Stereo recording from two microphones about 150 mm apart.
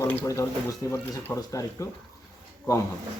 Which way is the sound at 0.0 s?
15° left (ahead or behind).